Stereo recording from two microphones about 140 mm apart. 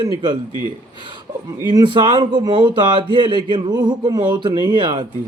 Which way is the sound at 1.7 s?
35° right (ahead or behind).